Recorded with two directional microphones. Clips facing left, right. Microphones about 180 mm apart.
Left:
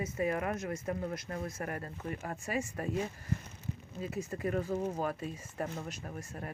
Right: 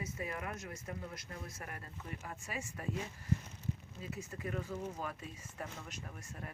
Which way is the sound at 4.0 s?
45° left (ahead or behind).